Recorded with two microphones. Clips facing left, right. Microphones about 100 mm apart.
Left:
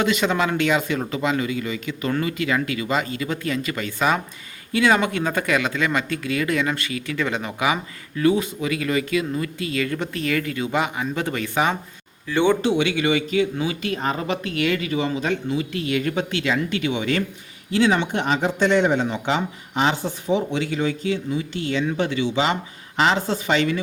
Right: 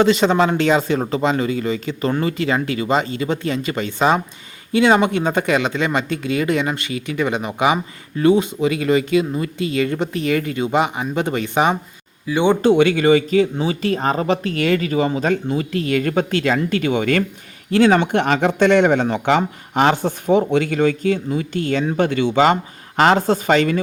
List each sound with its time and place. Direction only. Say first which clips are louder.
0.0 s speech: right 6 dB; 30° right (ahead or behind)
12.6 s speech: right 7 dB; 45° right (ahead or behind)